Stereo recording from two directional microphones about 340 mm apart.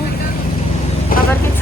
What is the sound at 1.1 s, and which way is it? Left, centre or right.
Vehicle, left.